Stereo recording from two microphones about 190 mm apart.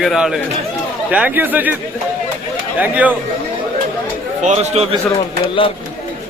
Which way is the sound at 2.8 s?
10° right (ahead or behind).